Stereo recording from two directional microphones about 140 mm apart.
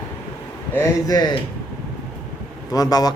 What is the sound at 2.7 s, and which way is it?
Speech, 25° left (ahead or behind).